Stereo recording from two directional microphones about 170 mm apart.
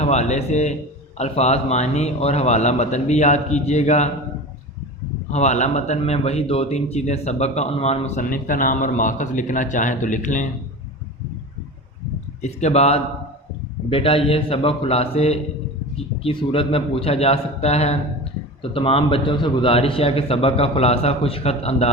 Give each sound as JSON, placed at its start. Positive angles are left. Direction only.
{"t": 0.0, "sound": "speech", "side_deg": 40}
{"t": 5.3, "sound": "speech", "side_deg": 40}
{"t": 12.4, "sound": "speech", "side_deg": 40}